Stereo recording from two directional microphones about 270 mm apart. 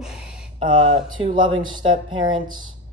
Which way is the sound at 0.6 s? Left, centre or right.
Centre.